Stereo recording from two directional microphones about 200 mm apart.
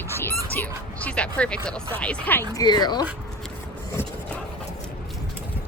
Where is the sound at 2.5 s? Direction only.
20° left (ahead or behind).